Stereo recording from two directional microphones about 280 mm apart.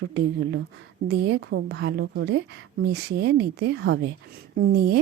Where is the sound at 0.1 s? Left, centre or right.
Right.